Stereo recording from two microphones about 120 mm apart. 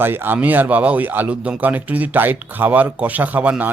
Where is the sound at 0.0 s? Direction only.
15° right (ahead or behind).